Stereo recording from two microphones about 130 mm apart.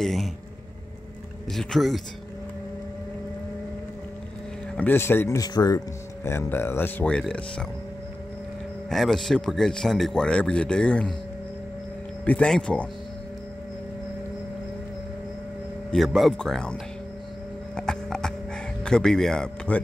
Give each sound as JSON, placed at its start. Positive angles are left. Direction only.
{"t": 0.0, "sound": "speech", "side_deg": 0}
{"t": 1.5, "sound": "speech", "side_deg": 0}
{"t": 4.7, "sound": "speech", "side_deg": 15}
{"t": 5.4, "sound": "speech", "side_deg": 30}
{"t": 8.9, "sound": "speech", "side_deg": 0}
{"t": 12.3, "sound": "speech", "side_deg": 10}
{"t": 15.9, "sound": "speech", "side_deg": 0}
{"t": 17.7, "sound": "music", "side_deg": 5}